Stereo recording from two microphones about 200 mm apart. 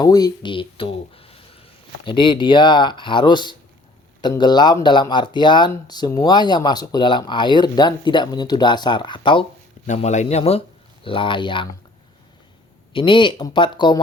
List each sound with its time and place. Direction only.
0.0 s speech: 20° left (ahead or behind)
9.8 s speech: 35° left (ahead or behind)
12.9 s speech: 25° left (ahead or behind)